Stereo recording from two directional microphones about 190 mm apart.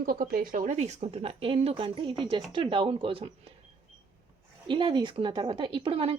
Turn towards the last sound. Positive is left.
turn(degrees=-30)  # may be behind; listen again after turning